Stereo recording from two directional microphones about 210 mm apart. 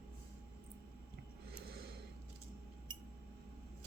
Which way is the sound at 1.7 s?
45° right (ahead or behind).